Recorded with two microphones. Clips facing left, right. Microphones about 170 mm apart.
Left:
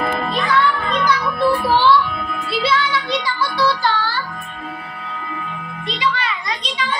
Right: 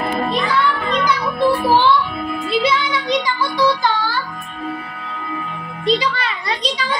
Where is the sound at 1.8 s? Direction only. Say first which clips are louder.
Left 1 dB; 20° right (ahead or behind).